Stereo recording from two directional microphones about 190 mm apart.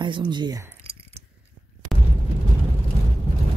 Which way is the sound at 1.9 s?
Centre (ahead or behind).